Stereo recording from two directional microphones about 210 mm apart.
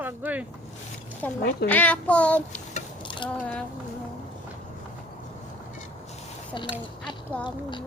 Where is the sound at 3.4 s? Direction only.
5° left (ahead or behind).